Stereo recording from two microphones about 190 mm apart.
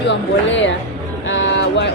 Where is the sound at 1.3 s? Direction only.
75° left (ahead or behind).